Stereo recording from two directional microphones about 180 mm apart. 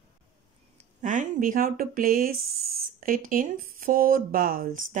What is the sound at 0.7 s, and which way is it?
Speech, 45° right (ahead or behind).